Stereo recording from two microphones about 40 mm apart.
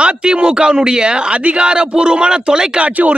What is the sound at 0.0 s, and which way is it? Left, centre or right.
A man's voice, right.